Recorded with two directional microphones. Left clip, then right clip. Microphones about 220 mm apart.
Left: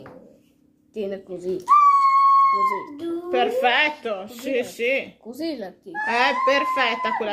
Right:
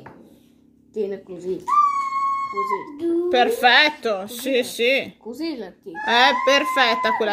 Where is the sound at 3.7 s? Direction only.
45° right (ahead or behind).